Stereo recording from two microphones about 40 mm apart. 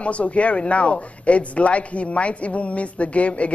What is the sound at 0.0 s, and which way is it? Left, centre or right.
Speech, left.